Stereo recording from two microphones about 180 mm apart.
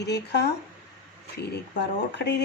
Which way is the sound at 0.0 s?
70° left (ahead or behind).